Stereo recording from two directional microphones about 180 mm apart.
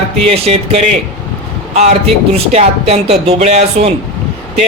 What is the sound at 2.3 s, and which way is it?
Speech, 35° right (ahead or behind).